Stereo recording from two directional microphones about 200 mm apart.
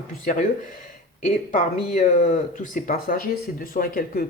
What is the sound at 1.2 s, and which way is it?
Speech, 40° left (ahead or behind).